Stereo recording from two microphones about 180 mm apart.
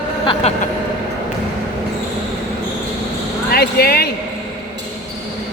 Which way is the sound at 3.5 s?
60° left (ahead or behind).